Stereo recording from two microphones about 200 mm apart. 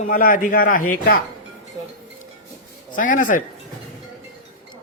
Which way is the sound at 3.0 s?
40° left (ahead or behind).